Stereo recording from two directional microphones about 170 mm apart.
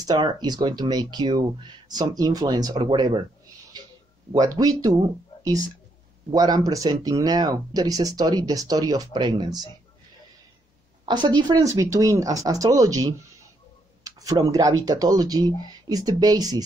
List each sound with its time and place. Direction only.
0.0 s speech: 25° right (ahead or behind)
3.8 s a sound: 25° right (ahead or behind)
4.3 s speech: 20° right (ahead or behind)
6.3 s speech: 25° right (ahead or behind)
11.1 s speech: 25° right (ahead or behind)